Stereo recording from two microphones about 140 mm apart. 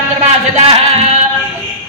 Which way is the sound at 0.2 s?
50° right (ahead or behind).